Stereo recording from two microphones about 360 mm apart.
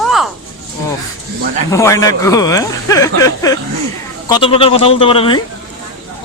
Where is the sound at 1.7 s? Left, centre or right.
Centre.